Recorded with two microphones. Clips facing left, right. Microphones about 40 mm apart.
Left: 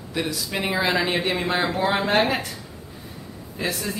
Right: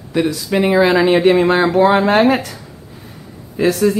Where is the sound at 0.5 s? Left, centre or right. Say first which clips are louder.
Right 10 dB; centre.